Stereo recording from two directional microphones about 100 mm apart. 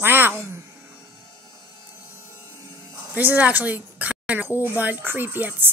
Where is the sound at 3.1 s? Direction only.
15° right (ahead or behind).